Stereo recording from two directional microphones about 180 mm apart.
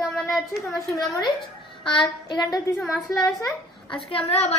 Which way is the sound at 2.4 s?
20° left (ahead or behind).